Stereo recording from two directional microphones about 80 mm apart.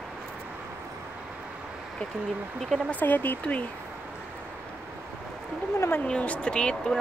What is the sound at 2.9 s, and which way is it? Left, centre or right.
Speech, left.